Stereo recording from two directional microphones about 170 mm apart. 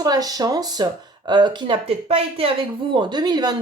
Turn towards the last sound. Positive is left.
turn(degrees=-25)  # may be behind; listen again after turning